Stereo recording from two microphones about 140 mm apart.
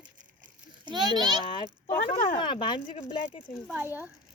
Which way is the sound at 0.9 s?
30° right (ahead or behind).